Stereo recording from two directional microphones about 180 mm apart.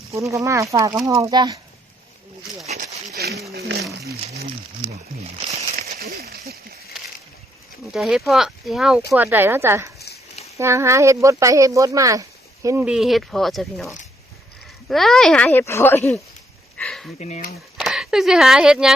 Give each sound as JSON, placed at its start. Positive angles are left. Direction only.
{"t": 0.1, "sound": "speech", "side_deg": -15}
{"t": 3.2, "sound": "speech", "side_deg": -60}
{"t": 3.5, "sound": "a sound", "side_deg": -60}
{"t": 4.9, "sound": "speech", "side_deg": -35}
{"t": 6.1, "sound": "a sound", "side_deg": -60}
{"t": 7.9, "sound": "speech", "side_deg": 0}
{"t": 16.7, "sound": "a sound", "side_deg": 5}
{"t": 17.2, "sound": "speech", "side_deg": 40}
{"t": 17.7, "sound": "speech", "side_deg": 0}